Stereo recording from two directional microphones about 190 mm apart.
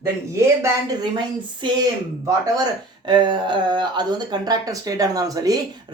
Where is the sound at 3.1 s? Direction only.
25° right (ahead or behind).